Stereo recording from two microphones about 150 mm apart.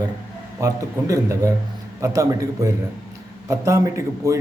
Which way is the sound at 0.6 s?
20° right (ahead or behind).